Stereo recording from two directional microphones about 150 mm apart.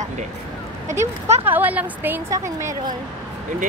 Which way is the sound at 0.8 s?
15° right (ahead or behind).